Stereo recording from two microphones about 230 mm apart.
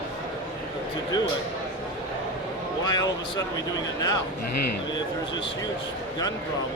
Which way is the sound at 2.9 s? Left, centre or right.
Centre.